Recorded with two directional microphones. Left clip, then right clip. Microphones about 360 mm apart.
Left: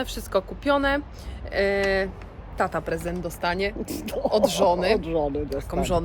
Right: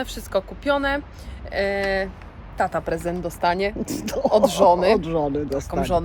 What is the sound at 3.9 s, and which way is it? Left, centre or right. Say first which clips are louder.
Speech: right 4 dB; right.